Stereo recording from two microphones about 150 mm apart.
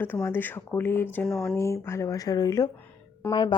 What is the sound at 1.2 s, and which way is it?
Speech, 5° left (ahead or behind).